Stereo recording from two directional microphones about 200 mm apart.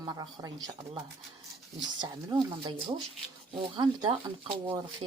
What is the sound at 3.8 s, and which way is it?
Speech, 25° right (ahead or behind).